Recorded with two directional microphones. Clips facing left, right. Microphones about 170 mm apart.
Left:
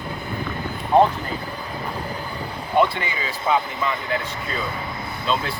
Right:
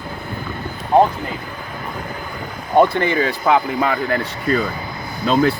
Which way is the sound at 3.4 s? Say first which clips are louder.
Right 3 dB; 90° right.